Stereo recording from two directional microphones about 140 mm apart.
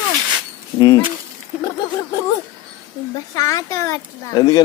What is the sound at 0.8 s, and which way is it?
Speech, 25° left (ahead or behind).